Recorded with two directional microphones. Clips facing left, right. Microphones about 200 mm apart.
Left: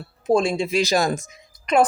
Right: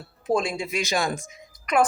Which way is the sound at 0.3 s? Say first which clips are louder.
Left 5 dB; 30° left (ahead or behind).